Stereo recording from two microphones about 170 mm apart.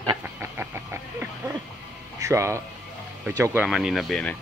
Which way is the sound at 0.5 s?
15° right (ahead or behind).